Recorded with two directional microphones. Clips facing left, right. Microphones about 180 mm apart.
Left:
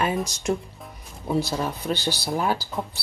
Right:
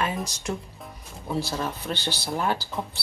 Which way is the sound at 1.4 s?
15° left (ahead or behind).